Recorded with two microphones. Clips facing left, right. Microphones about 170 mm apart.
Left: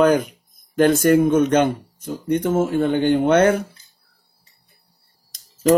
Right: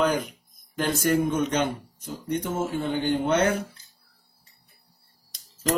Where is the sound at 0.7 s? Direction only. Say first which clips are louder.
Left 9 dB; 55° left (ahead or behind).